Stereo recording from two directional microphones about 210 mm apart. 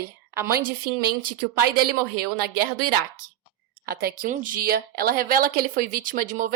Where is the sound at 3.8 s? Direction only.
45° right (ahead or behind).